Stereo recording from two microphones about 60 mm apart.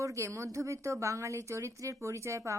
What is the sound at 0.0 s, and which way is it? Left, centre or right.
A woman's voice, right.